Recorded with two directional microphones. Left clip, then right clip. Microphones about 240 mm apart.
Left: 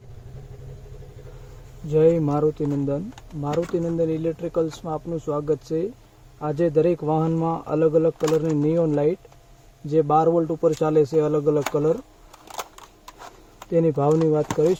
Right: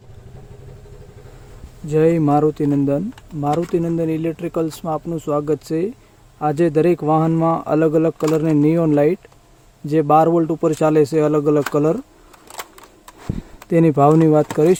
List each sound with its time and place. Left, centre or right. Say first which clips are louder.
1.9 s speech: right 3 dB; right
12.5 s camera: even; centre
13.7 s speech: right 6 dB; right